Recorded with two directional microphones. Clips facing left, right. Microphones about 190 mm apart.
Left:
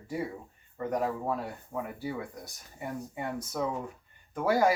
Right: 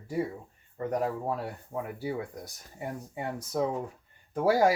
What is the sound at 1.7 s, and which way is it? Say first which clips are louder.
Speech: right 2 dB; 35° right (ahead or behind).